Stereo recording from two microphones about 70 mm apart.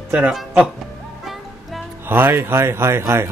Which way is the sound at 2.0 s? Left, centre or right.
Right.